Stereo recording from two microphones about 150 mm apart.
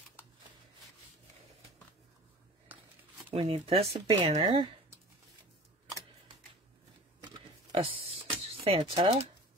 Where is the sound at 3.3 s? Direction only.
40° right (ahead or behind).